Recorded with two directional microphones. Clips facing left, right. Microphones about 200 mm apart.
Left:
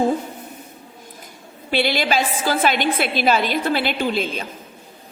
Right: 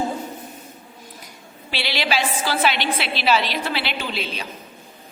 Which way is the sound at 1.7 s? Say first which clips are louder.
Left 5 dB; 50° left (ahead or behind).